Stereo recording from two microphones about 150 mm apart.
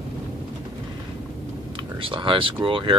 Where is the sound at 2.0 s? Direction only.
35° right (ahead or behind).